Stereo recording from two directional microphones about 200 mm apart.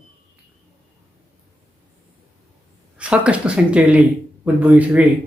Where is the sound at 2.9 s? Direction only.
5° right (ahead or behind).